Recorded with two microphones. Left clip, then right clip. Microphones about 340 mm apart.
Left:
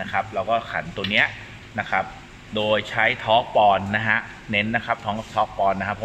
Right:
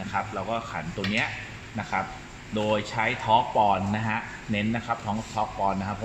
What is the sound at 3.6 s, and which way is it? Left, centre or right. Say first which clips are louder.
A man's voice: left 6 dB; left.